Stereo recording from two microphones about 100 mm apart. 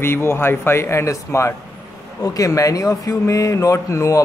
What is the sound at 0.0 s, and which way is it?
Speech, 25° left (ahead or behind).